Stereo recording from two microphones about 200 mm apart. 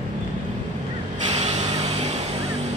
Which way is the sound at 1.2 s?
35° right (ahead or behind).